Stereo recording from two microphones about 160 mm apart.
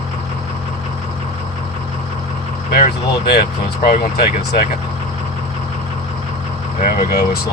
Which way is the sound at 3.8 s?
80° left.